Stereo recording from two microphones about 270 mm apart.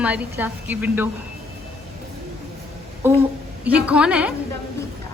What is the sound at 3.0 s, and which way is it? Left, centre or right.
A woman's voice, centre.